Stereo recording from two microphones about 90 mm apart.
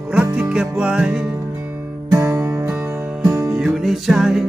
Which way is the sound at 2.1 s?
35° right (ahead or behind).